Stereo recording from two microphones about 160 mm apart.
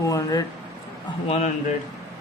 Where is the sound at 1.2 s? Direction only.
45° left (ahead or behind).